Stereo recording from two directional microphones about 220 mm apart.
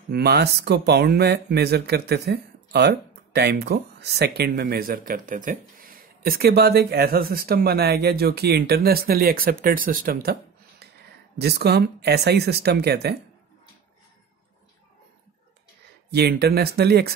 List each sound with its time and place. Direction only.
0.1 s speech: 50° right (ahead or behind)
11.3 s speech: 45° right (ahead or behind)
16.1 s speech: 50° right (ahead or behind)